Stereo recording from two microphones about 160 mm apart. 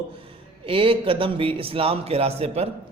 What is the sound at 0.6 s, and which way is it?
A man's voice, 35° right (ahead or behind).